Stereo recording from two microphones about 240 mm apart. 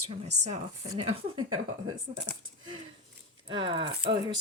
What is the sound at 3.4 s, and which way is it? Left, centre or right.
Speech, right.